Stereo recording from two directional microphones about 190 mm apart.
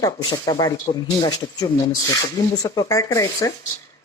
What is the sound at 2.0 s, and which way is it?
Speech, 20° left (ahead or behind).